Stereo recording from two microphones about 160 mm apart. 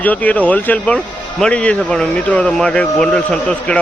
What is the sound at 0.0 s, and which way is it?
Speech, 10° left (ahead or behind).